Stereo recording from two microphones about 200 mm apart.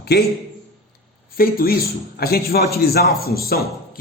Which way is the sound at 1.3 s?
45° left (ahead or behind).